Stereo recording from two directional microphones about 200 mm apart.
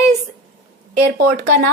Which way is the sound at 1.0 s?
55° right (ahead or behind).